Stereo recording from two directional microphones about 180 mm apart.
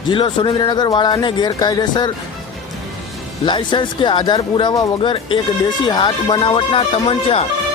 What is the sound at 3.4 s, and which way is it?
Speech, 25° left (ahead or behind).